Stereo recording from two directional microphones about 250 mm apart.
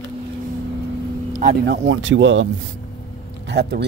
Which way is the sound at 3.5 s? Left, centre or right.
Right.